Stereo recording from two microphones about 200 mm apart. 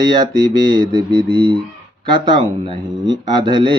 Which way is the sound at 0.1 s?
20° right (ahead or behind).